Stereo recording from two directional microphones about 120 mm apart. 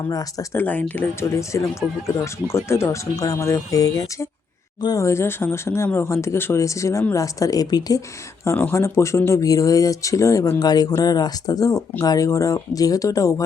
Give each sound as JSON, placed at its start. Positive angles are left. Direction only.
{"t": 0.1, "sound": "speech", "side_deg": 30}
{"t": 0.5, "sound": "speech", "side_deg": 15}
{"t": 8.4, "sound": "speech", "side_deg": 20}